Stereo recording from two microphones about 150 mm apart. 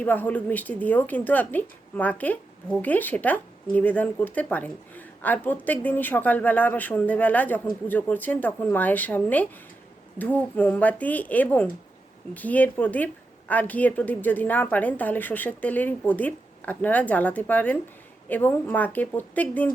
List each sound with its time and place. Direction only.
0.0 s speech: 10° left (ahead or behind)